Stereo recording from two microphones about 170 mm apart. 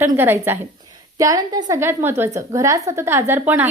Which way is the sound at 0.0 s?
15° right (ahead or behind).